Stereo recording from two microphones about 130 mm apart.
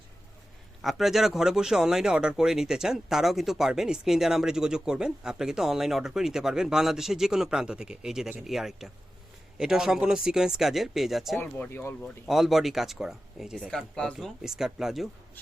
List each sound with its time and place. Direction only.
0.8 s speech: centre (ahead or behind)
11.3 s speech: 15° left (ahead or behind)
12.3 s speech: centre (ahead or behind)